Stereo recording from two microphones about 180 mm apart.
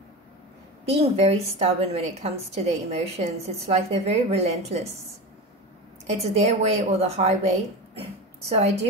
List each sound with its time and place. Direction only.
0.8 s a woman's voice: 35° right (ahead or behind)
6.0 s a woman's voice: 35° right (ahead or behind)
7.9 s a sound: 35° right (ahead or behind)